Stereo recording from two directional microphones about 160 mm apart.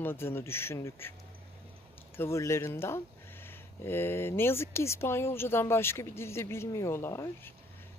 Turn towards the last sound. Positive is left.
turn(degrees=15)  # may be behind; listen again after turning